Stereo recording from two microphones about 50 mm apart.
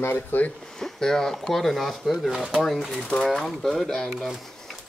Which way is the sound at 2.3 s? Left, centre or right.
Centre.